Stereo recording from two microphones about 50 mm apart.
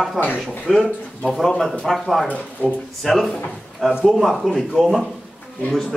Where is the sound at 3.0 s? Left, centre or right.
Centre.